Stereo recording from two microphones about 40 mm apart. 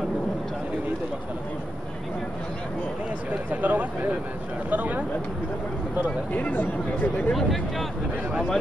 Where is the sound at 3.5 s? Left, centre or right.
Right.